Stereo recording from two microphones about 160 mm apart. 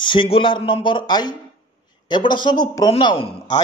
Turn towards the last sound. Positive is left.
turn(degrees=25)  # may be behind; listen again after turning